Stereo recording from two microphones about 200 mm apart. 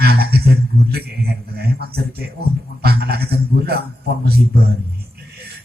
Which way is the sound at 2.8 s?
50° right (ahead or behind).